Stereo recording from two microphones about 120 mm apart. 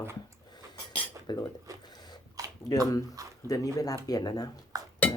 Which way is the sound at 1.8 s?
35° left (ahead or behind).